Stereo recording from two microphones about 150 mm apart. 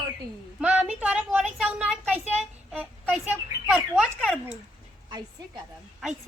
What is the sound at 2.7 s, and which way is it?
Speech, 10° right (ahead or behind).